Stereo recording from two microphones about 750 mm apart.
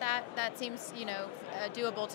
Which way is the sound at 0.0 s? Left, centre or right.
Left.